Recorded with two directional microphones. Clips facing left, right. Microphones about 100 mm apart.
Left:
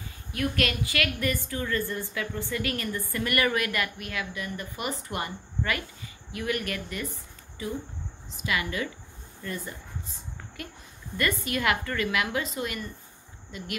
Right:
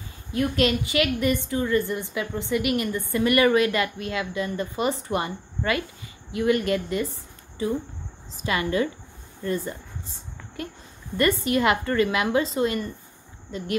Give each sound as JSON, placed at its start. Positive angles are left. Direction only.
{"t": 0.3, "sound": "a woman's voice", "side_deg": -25}
{"t": 8.4, "sound": "a woman's voice", "side_deg": -35}
{"t": 11.1, "sound": "a woman's voice", "side_deg": -25}